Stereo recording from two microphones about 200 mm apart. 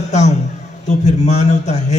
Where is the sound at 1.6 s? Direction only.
35° left (ahead or behind).